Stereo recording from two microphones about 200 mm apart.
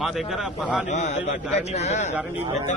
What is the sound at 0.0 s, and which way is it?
Speech, centre (ahead or behind).